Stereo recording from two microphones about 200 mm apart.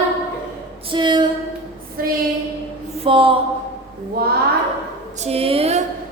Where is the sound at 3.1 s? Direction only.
25° right (ahead or behind).